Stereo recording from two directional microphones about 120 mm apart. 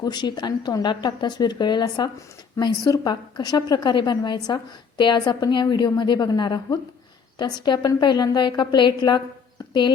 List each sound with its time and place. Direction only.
0.0 s a woman's voice: 35° left (ahead or behind)